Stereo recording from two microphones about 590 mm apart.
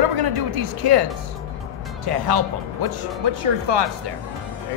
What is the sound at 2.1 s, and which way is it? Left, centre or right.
Speech, right.